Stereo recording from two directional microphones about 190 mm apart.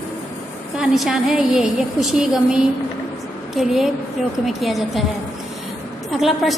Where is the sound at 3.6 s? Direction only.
Centre (ahead or behind).